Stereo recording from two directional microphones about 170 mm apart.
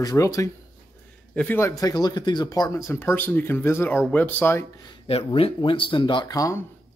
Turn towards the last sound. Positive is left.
turn(degrees=20)  # may be behind; listen again after turning